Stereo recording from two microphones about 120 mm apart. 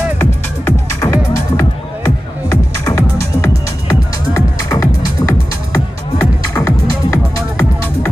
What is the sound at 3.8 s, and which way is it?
Music, 30° left (ahead or behind).